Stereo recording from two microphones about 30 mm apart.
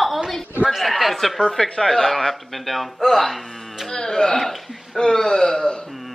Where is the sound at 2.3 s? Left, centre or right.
Centre.